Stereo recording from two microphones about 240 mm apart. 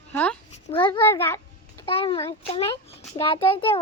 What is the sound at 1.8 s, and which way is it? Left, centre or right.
Speech, left.